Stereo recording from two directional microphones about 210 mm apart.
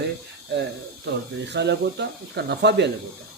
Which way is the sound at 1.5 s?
55° right (ahead or behind).